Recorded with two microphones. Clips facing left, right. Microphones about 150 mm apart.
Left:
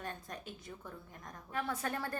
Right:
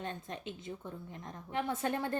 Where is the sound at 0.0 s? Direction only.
25° right (ahead or behind).